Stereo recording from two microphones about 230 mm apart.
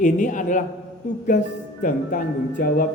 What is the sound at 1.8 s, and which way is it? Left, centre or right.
A man's voice, left.